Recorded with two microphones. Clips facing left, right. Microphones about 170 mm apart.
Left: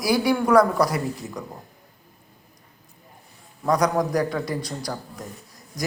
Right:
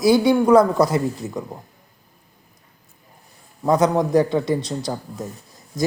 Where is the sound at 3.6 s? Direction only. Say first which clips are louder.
Right 4 dB; 25° right (ahead or behind).